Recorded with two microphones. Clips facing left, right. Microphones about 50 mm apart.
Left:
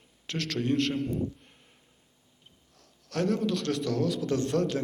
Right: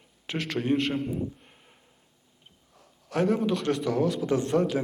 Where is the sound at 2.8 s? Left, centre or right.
Centre.